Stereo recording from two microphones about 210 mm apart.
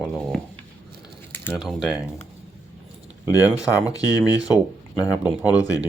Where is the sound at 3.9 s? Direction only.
15° left (ahead or behind).